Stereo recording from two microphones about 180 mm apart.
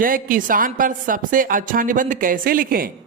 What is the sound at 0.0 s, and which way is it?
A woman's voice, 50° right (ahead or behind).